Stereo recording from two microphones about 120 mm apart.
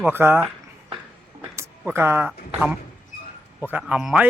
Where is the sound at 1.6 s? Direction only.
20° right (ahead or behind).